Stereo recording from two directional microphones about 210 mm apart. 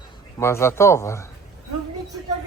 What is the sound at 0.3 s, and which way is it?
Speech, 15° left (ahead or behind).